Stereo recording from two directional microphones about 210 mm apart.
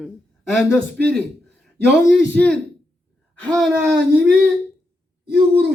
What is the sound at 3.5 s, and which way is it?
Speech, 5° right (ahead or behind).